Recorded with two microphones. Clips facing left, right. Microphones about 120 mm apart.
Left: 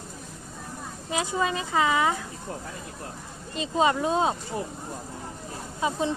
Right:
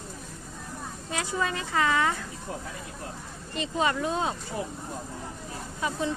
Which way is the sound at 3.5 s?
20° left (ahead or behind).